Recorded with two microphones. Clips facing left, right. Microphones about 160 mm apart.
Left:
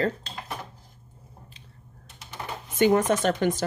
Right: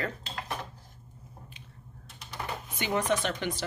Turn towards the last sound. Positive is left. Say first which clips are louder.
# left 7 dB
turn(degrees=45)  # may be behind; listen again after turning